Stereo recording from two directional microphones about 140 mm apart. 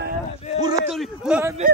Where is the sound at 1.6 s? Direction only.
65° right (ahead or behind).